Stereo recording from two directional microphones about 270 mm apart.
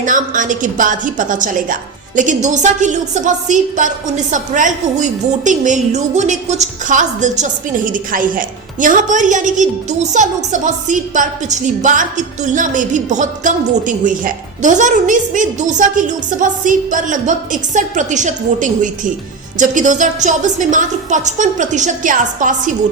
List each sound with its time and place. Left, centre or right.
0.0 s a woman's voice: right